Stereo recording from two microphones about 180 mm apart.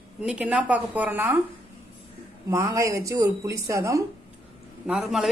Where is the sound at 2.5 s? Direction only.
15° right (ahead or behind).